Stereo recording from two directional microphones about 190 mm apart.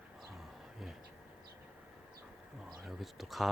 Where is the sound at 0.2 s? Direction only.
Centre (ahead or behind).